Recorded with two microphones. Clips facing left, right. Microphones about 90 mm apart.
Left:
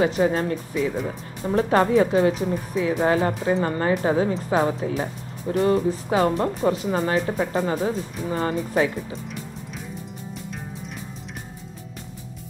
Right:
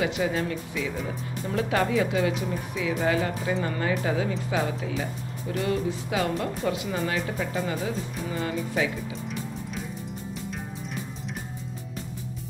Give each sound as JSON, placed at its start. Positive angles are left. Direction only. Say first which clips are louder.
{"t": 0.0, "sound": "speech", "louder": "left 6 dB", "side_deg": 40}